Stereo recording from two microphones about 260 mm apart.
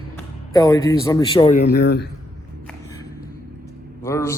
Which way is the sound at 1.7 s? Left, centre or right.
Left.